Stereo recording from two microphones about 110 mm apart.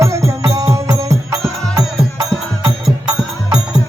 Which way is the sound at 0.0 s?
25° right (ahead or behind).